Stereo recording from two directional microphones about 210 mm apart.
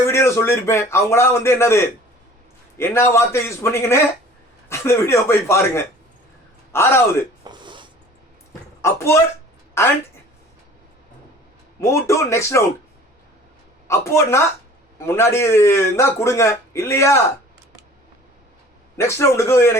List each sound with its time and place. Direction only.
0.0 s a man's voice: 15° left (ahead or behind)
7.4 s zipper: 20° right (ahead or behind)
8.8 s speech: 10° left (ahead or behind)
11.8 s a man's voice: 15° left (ahead or behind)
13.8 s a man's voice: 15° left (ahead or behind)
18.9 s a man's voice: 10° left (ahead or behind)